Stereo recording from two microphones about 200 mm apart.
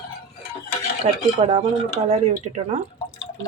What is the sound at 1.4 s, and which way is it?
A man's voice, 35° right (ahead or behind).